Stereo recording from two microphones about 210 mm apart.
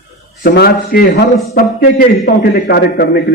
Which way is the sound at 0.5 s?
45° left (ahead or behind).